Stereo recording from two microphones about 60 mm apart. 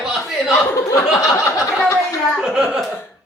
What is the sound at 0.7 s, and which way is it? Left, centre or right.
Speech, left.